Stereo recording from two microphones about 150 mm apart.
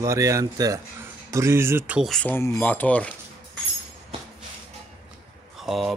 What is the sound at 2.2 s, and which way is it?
Speech, 10° left (ahead or behind).